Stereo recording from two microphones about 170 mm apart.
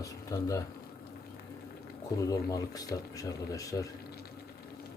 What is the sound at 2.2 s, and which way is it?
Speech, 20° left (ahead or behind).